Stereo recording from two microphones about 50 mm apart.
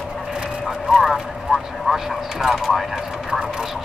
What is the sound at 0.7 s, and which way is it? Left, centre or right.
Vehicle, centre.